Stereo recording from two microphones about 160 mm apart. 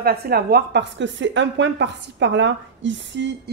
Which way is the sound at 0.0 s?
75° right (ahead or behind).